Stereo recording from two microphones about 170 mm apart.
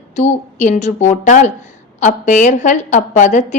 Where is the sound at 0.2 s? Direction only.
45° left (ahead or behind).